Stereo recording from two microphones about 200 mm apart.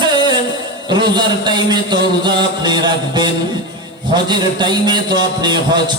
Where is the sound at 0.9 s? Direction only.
20° right (ahead or behind).